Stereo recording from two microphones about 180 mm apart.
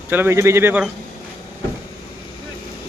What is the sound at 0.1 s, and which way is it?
Speech, 15° right (ahead or behind).